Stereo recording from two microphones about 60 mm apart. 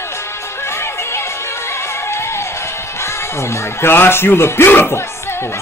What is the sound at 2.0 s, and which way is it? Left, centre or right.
Music, left.